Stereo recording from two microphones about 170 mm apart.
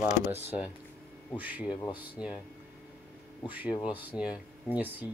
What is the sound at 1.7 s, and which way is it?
Speech, 25° left (ahead or behind).